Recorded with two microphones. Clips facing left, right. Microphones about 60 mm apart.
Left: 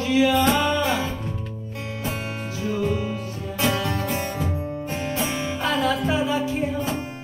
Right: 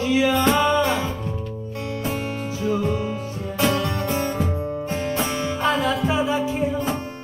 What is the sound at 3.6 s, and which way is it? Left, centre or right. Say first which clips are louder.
Music: right 2 dB; centre.